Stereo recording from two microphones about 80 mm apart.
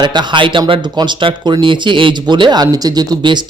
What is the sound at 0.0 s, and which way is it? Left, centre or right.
Speech, right.